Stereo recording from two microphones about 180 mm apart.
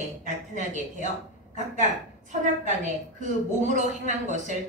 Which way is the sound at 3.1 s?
45° right (ahead or behind).